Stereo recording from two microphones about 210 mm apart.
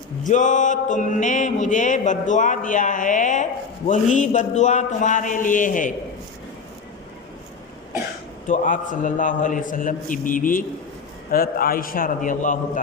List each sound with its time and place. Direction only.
0.3 s music: 35° left (ahead or behind)
8.4 s music: 40° left (ahead or behind)
11.3 s a man's voice: 45° left (ahead or behind)